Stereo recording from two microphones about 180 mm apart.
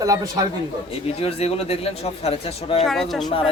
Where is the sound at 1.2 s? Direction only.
35° left (ahead or behind).